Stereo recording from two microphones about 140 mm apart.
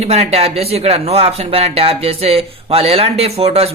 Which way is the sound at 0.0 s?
50° right (ahead or behind).